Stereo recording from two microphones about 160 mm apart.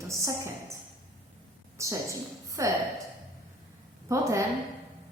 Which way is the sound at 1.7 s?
20° right (ahead or behind).